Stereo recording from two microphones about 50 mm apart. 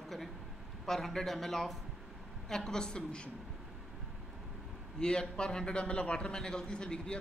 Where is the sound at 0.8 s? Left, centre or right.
Centre.